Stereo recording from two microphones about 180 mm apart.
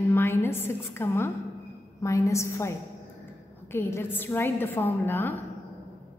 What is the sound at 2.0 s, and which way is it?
A woman's voice, 15° left (ahead or behind).